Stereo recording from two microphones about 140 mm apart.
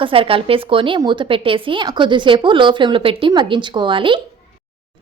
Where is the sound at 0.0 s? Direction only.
40° right (ahead or behind).